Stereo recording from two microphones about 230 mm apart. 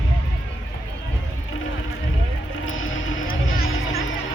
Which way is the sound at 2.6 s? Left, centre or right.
Left.